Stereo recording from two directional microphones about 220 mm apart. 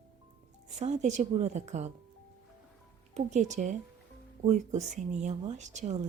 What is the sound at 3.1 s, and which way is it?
A woman's voice, 30° right (ahead or behind).